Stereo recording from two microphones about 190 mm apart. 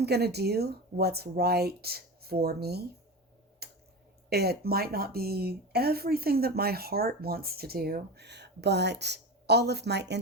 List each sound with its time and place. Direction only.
0.0 s speech: 60° right (ahead or behind)
3.6 s a sound: 55° right (ahead or behind)
4.3 s speech: 55° right (ahead or behind)